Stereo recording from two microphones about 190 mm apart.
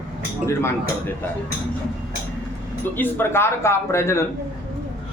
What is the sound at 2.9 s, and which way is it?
A man's voice, 10° left (ahead or behind).